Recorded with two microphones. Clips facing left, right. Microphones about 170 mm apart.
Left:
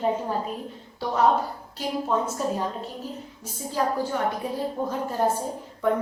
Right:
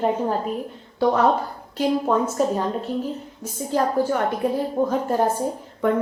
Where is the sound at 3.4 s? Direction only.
55° right (ahead or behind).